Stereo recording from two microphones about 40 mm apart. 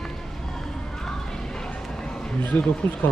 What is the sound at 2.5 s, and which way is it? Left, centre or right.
Speech, left.